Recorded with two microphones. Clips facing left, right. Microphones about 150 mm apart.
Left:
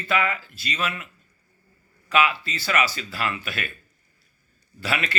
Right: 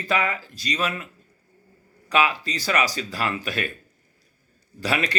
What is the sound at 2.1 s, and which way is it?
Speech, 35° right (ahead or behind).